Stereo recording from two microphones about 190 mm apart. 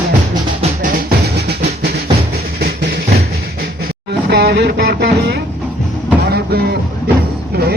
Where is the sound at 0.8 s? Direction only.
55° right (ahead or behind).